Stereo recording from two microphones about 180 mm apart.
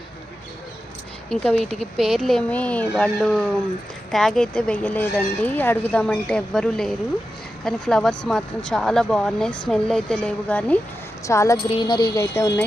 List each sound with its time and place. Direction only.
1.3 s speech: centre (ahead or behind)
11.3 s speech: 15° left (ahead or behind)